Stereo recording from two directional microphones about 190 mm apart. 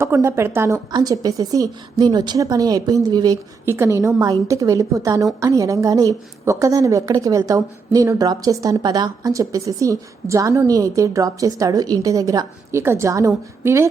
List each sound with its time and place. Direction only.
0.0 s a woman's voice: 15° right (ahead or behind)